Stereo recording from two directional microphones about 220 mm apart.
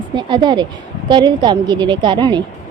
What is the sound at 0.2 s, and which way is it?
A woman's voice, 20° right (ahead or behind).